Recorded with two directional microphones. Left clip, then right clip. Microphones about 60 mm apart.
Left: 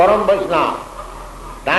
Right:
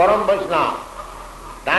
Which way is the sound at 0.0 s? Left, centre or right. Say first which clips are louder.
Left 3 dB; right.